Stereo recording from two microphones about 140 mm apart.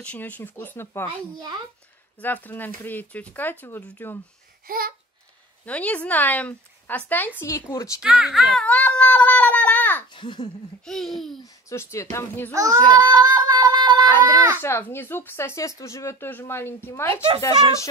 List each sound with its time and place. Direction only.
0.0 s speech: 10° left (ahead or behind)
2.1 s speech: 10° left (ahead or behind)
4.6 s babbling: 90° right
5.7 s speech: 10° left (ahead or behind)
8.0 s speech: 5° right (ahead or behind); by 10.0 s 10° left (ahead or behind)
10.1 s a child's voice: 35° left (ahead or behind)
10.9 s speech: centre (ahead or behind)
11.7 s a woman's voice: 20° left (ahead or behind)
12.5 s speech: 25° right (ahead or behind)
13.0 s a sound: 30° right (ahead or behind)
14.3 s speech: 25° right (ahead or behind)
14.6 s speech: 15° left (ahead or behind)
17.1 s speech: 40° right (ahead or behind)
17.4 s a woman's voice: 20° left (ahead or behind)